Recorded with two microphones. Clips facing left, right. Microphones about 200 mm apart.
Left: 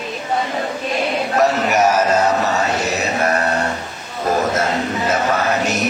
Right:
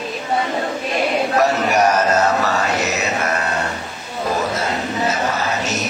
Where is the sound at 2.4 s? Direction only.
25° left (ahead or behind).